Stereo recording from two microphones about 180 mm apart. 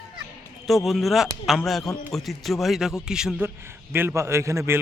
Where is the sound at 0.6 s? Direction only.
Centre (ahead or behind).